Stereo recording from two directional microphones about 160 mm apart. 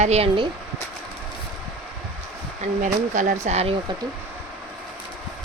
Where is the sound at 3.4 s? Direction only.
40° right (ahead or behind).